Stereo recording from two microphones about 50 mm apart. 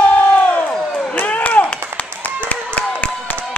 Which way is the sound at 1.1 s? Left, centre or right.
Left.